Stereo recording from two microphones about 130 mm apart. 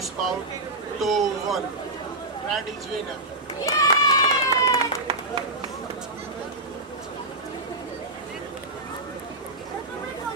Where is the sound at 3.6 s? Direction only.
25° left (ahead or behind).